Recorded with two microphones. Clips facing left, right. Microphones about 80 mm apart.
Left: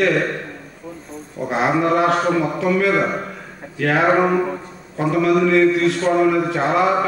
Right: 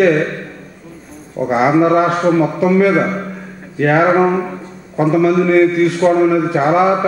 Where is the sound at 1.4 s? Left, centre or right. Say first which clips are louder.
Right 6 dB; centre.